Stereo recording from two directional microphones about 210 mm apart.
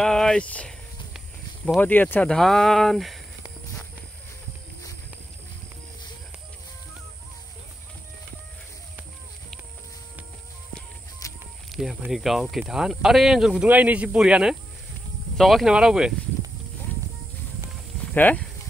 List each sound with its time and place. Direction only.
0.0 s a sound: 5° left (ahead or behind)
1.8 s speech: 10° left (ahead or behind)
11.2 s snake: 15° left (ahead or behind)
11.7 s speech: centre (ahead or behind)
18.1 s speech: 5° left (ahead or behind)